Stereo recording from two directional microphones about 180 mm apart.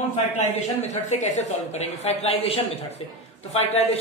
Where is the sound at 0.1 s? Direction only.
40° left (ahead or behind).